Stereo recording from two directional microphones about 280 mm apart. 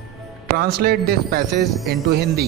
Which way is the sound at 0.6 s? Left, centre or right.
Right.